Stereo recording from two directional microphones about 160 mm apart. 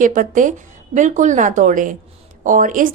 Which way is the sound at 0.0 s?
55° right (ahead or behind).